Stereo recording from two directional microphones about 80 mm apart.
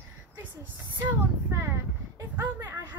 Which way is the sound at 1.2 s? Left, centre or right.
Right.